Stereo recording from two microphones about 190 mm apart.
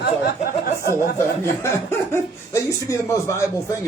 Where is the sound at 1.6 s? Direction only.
15° left (ahead or behind).